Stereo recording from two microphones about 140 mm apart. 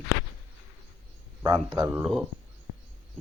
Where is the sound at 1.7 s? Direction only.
20° right (ahead or behind).